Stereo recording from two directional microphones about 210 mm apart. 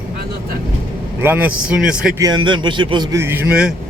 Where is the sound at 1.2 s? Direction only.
10° right (ahead or behind).